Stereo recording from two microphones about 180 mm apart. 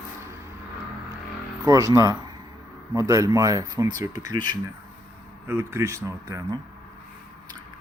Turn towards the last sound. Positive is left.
turn(degrees=-20)  # may be behind; listen again after turning